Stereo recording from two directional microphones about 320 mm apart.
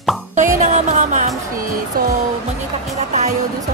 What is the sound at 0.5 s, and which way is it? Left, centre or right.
Music, right.